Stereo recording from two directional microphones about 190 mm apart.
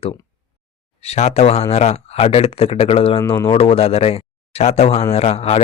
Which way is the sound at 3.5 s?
30° left (ahead or behind).